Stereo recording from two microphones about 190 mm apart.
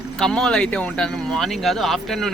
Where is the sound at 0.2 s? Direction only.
5° left (ahead or behind).